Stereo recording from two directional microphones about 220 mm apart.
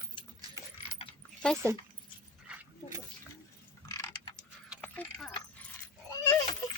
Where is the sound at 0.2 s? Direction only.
25° left (ahead or behind).